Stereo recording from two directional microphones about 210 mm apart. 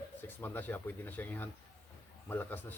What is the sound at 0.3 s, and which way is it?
Speech, 10° left (ahead or behind).